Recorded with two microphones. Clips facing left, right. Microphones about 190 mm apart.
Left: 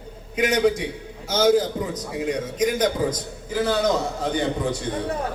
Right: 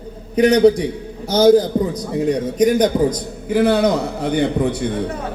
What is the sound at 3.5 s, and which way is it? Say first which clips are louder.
A man's voice: right 6 dB; 60° right (ahead or behind).